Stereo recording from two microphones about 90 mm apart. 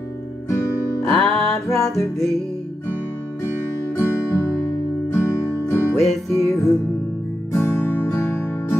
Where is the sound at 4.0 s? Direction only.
30° left (ahead or behind).